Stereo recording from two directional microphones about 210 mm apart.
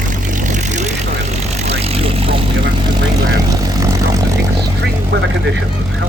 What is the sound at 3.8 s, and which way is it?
Vehicle, 15° right (ahead or behind).